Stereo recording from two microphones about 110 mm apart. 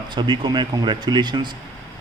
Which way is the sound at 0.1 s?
45° right (ahead or behind).